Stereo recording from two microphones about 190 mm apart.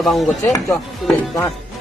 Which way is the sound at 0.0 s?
Centre (ahead or behind).